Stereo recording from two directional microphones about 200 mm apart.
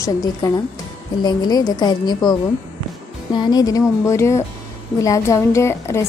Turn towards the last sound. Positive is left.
turn(degrees=15)  # may be behind; listen again after turning